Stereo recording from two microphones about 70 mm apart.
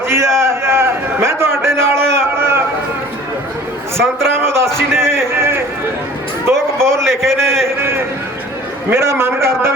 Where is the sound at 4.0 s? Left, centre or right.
Right.